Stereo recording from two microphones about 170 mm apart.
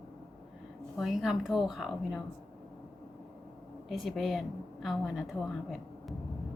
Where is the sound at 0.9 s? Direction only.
Centre (ahead or behind).